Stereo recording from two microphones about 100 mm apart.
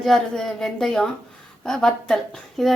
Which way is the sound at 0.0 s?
5° left (ahead or behind).